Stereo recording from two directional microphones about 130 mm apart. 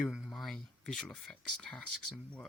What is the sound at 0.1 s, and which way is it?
Speech, 5° right (ahead or behind).